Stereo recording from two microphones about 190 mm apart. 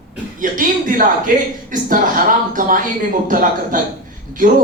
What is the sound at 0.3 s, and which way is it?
A man's voice, 45° right (ahead or behind).